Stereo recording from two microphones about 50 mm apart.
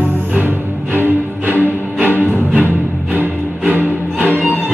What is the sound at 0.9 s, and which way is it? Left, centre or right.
Music, right.